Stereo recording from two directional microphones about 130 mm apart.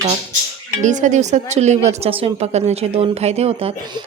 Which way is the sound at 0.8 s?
70° right (ahead or behind).